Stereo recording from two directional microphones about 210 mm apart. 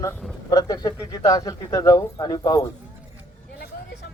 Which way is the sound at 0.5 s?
15° left (ahead or behind).